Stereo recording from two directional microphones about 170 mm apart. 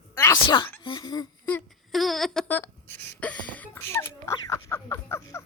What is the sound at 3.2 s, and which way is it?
Speech, 10° left (ahead or behind).